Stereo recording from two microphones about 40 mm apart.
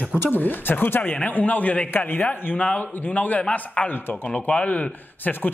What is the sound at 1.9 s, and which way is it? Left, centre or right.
A man's voice, left.